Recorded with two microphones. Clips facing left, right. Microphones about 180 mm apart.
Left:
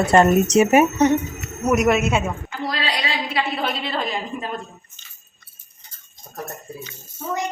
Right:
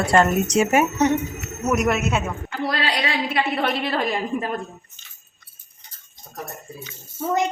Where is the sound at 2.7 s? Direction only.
55° right (ahead or behind).